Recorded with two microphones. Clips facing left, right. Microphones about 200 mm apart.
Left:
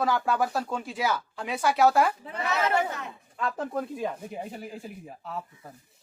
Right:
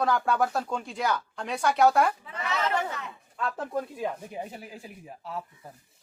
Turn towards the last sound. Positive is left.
turn(degrees=0)  # may be behind; listen again after turning